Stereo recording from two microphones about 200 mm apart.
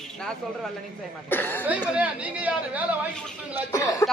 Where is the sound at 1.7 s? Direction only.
5° right (ahead or behind).